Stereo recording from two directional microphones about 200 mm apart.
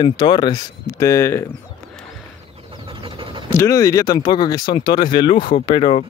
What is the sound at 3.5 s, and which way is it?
Speech, 15° left (ahead or behind).